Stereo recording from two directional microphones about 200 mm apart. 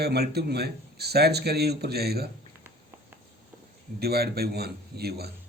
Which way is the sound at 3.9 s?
50° right (ahead or behind).